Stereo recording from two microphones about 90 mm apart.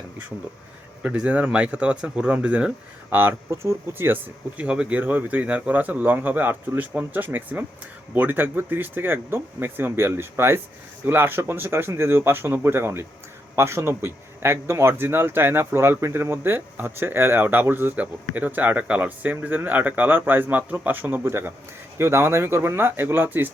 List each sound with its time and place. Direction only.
1.0 s speech: 10° right (ahead or behind)
3.1 s speech: 25° right (ahead or behind)